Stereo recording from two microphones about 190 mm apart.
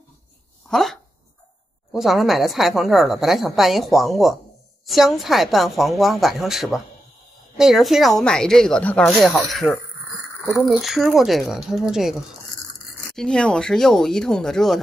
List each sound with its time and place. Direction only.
0.7 s a woman's voice: centre (ahead or behind)